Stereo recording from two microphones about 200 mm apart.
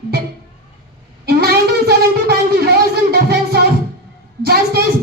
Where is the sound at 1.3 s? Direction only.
50° right (ahead or behind).